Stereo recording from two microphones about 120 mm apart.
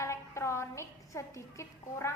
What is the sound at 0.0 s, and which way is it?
A woman's voice, 25° left (ahead or behind).